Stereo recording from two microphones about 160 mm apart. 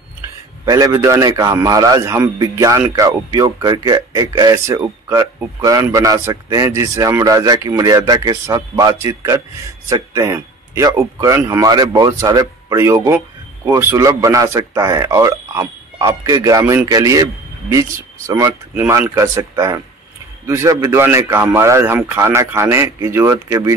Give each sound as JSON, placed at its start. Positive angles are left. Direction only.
{"t": 0.7, "sound": "a man's voice", "side_deg": -20}
{"t": 20.4, "sound": "a man's voice", "side_deg": -20}